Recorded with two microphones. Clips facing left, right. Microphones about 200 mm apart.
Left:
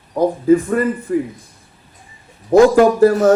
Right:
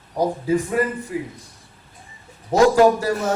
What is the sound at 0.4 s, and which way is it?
Speech, 50° left (ahead or behind).